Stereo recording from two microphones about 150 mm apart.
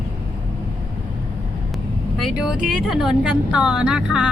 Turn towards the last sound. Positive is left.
turn(degrees=-5)  # may be behind; listen again after turning